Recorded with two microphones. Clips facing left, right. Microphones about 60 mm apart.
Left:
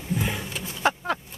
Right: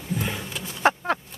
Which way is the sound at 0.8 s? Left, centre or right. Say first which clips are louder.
Right 3 dB; right.